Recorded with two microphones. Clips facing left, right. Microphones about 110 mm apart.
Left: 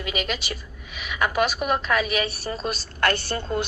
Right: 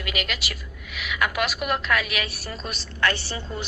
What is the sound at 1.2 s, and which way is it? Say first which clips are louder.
A woman's voice: left 3 dB; 35° left (ahead or behind).